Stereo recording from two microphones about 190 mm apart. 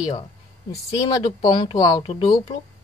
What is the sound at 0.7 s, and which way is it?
Speech, 20° left (ahead or behind).